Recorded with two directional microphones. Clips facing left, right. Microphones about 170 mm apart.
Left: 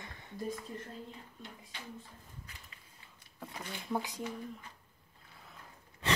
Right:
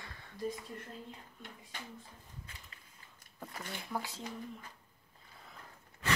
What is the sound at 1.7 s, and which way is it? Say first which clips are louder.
Speech: right 2 dB; 45° right (ahead or behind).